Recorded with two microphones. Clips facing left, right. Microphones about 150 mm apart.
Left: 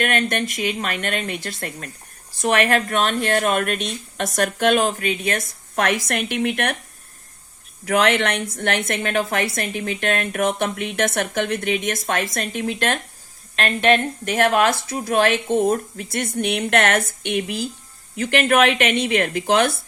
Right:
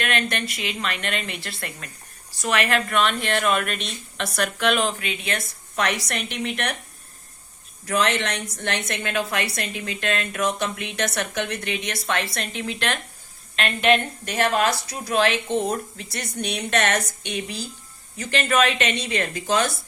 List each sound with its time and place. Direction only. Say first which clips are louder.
0.0 s a woman's voice: left 4 dB; 45° left (ahead or behind)
7.9 s a woman's voice: left 5 dB; 65° left (ahead or behind)